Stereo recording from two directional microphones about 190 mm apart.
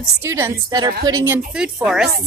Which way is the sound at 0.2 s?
15° right (ahead or behind).